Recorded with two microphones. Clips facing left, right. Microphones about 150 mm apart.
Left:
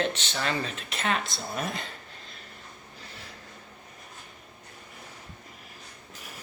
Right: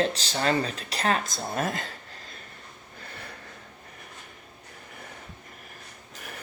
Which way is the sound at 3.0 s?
55° right (ahead or behind).